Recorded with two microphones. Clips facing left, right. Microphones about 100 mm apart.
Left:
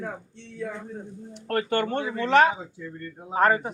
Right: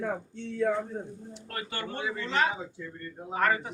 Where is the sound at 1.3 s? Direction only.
55° left (ahead or behind).